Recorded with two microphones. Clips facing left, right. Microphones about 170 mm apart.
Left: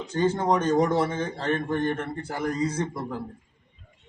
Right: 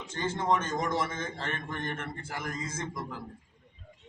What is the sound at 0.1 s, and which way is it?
A man's voice, 35° left (ahead or behind).